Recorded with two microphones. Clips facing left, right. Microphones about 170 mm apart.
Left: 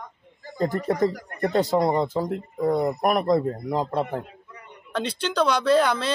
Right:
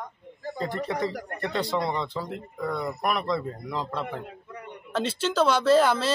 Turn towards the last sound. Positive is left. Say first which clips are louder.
# even
turn(degrees=-5)  # may be behind; listen again after turning